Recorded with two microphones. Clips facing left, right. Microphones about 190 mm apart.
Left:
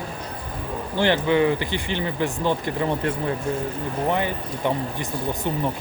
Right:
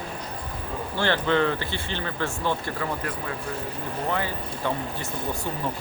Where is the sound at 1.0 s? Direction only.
15° left (ahead or behind).